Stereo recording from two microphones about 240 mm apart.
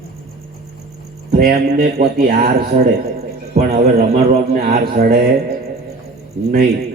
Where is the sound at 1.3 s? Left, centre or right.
Right.